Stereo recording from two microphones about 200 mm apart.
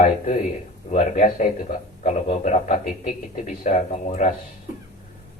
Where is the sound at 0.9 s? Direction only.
35° left (ahead or behind).